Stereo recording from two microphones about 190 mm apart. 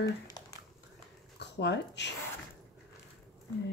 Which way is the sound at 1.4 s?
65° left (ahead or behind).